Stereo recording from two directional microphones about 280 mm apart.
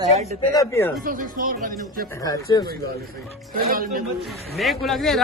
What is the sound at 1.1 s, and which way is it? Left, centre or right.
Speech, right.